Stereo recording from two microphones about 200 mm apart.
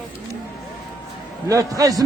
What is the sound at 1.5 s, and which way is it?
Speech, 15° right (ahead or behind).